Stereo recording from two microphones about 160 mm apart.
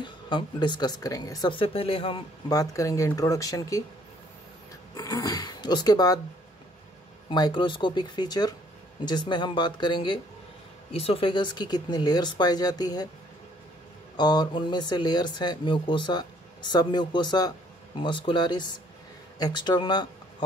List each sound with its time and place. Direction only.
0.0 s speech: 30° left (ahead or behind)
2.5 s speech: 20° left (ahead or behind)
4.9 s speech: 20° left (ahead or behind)
7.2 s speech: 30° left (ahead or behind)
14.1 s speech: 25° left (ahead or behind)